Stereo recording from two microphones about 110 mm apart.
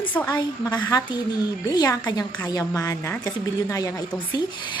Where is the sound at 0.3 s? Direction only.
35° left (ahead or behind).